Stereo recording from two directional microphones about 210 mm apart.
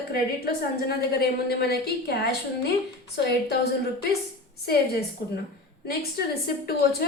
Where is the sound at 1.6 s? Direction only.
50° left (ahead or behind).